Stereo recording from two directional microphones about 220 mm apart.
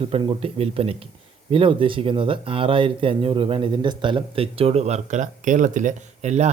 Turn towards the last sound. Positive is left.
turn(degrees=-30)  # may be behind; listen again after turning